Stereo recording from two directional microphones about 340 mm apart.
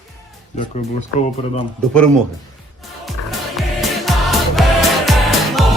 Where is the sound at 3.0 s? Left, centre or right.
Centre.